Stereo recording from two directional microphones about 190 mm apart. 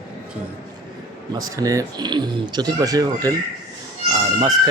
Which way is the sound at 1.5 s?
15° right (ahead or behind).